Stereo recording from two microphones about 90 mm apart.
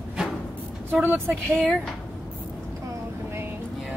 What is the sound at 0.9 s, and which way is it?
Speech, 20° right (ahead or behind).